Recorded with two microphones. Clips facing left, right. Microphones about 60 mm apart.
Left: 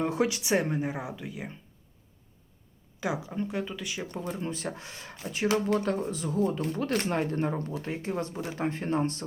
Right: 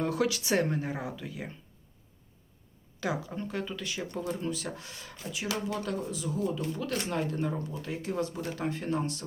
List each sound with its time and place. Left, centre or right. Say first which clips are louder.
0.0 s speech: left 1 dB; left
3.0 s speech: left 2 dB; centre
4.4 s speech: left 1 dB; left